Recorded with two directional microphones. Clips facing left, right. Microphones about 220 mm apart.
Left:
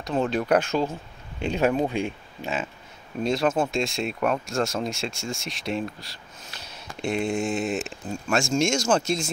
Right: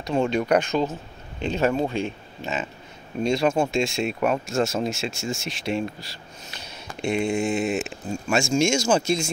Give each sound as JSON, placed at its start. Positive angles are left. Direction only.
{"t": 0.0, "sound": "speech", "side_deg": 0}